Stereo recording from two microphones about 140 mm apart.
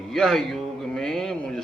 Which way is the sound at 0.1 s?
5° left (ahead or behind).